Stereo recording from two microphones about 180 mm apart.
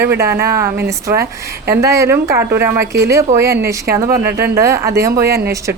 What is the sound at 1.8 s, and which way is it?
A woman's voice, 15° right (ahead or behind).